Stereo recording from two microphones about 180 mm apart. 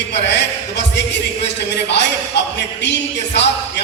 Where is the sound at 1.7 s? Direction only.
70° left (ahead or behind).